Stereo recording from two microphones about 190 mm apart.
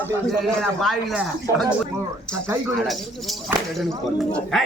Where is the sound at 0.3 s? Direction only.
Centre (ahead or behind).